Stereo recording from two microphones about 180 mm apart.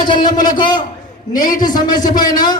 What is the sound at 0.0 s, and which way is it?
A man's voice, 25° left (ahead or behind).